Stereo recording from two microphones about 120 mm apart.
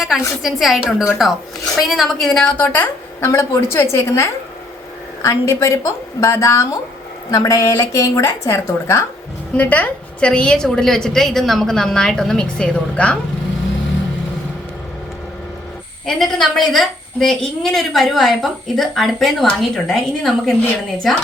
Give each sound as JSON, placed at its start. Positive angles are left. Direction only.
{"t": 0.0, "sound": "a woman's voice", "side_deg": 0}
{"t": 9.6, "sound": "a woman's voice", "side_deg": 10}
{"t": 16.0, "sound": "a woman's voice", "side_deg": 5}